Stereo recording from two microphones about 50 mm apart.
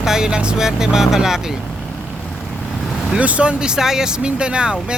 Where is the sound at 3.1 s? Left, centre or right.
Right.